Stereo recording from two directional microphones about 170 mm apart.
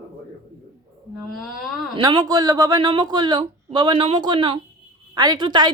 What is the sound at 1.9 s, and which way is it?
A woman's voice, 25° right (ahead or behind).